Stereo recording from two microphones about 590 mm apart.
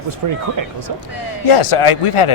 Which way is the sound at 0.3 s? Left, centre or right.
Right.